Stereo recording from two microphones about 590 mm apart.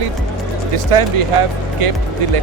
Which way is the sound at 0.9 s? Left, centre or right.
Right.